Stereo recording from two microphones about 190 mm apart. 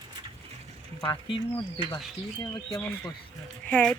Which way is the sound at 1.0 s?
25° left (ahead or behind).